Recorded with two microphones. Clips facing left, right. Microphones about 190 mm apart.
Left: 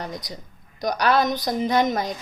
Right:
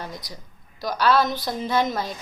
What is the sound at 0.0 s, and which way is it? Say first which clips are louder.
A woman's voice: left 3 dB; 20° left (ahead or behind).